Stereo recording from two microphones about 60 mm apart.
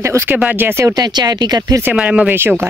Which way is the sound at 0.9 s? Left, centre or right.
Right.